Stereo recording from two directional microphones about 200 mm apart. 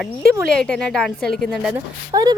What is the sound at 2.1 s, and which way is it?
Speech, 20° right (ahead or behind).